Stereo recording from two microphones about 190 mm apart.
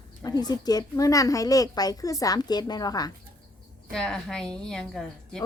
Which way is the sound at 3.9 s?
5° left (ahead or behind).